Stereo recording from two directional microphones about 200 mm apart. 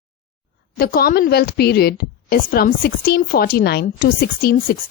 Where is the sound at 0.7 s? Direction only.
50° left (ahead or behind).